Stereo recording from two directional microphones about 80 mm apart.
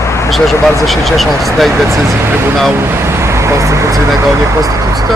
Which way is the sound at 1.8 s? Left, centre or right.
Right.